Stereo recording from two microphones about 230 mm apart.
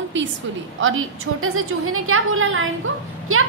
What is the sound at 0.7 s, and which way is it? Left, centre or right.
A woman's voice, right.